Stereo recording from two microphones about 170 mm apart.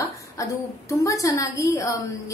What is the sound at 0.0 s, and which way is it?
A woman's voice, 20° left (ahead or behind).